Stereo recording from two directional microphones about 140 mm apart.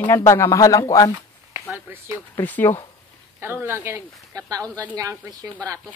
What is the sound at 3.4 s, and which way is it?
Speech, 15° right (ahead or behind).